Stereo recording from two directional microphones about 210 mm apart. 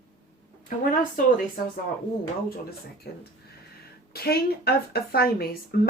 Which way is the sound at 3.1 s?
50° left (ahead or behind).